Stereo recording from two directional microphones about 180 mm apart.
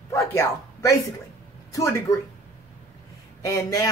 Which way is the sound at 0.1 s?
15° left (ahead or behind).